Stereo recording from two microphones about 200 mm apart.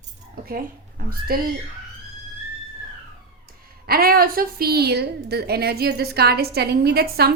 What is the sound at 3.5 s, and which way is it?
A woman's voice, 50° right (ahead or behind).